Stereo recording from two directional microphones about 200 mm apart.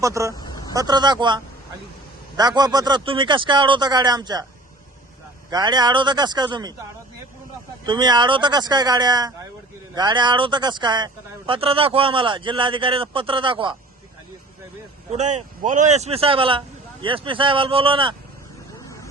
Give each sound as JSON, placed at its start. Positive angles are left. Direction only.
{"t": 0.0, "sound": "speech", "side_deg": -15}
{"t": 0.3, "sound": "a sound", "side_deg": 20}
{"t": 0.7, "sound": "speech", "side_deg": -20}
{"t": 5.5, "sound": "speech", "side_deg": -20}
{"t": 7.9, "sound": "speech", "side_deg": -20}
{"t": 15.1, "sound": "speech", "side_deg": -35}